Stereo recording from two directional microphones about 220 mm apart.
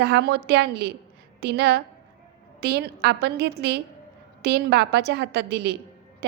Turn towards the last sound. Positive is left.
turn(degrees=-50)  # may be behind; listen again after turning